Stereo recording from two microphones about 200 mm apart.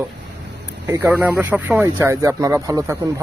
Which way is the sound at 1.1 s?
5° right (ahead or behind).